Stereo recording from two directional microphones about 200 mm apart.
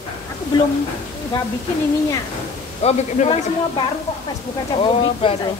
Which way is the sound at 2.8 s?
35° left (ahead or behind).